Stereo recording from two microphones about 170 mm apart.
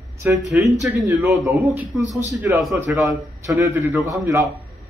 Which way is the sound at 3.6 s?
15° right (ahead or behind).